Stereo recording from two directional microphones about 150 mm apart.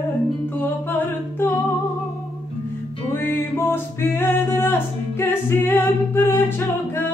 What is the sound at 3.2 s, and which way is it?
Music, 15° left (ahead or behind).